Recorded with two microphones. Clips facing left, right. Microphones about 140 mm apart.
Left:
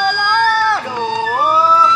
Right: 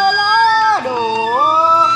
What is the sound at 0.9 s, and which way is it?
Cat, 15° right (ahead or behind).